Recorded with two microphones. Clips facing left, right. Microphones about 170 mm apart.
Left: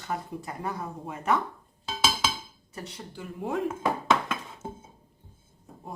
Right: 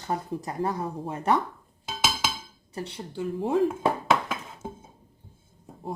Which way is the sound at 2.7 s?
30° right (ahead or behind).